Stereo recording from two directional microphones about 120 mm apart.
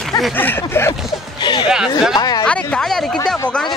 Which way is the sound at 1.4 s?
40° left (ahead or behind).